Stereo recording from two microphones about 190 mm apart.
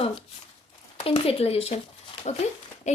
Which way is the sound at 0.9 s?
30° left (ahead or behind).